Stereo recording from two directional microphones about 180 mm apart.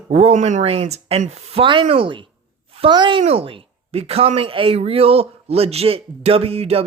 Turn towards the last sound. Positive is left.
turn(degrees=-35)  # may be behind; listen again after turning